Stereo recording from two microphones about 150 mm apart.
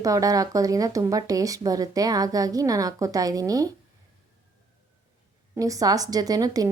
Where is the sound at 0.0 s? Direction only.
25° right (ahead or behind).